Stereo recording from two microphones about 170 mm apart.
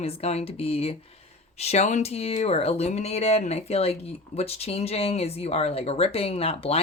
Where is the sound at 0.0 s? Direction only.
35° left (ahead or behind).